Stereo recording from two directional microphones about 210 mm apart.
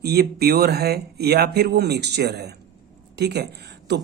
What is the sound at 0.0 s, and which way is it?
Speech, 50° right (ahead or behind).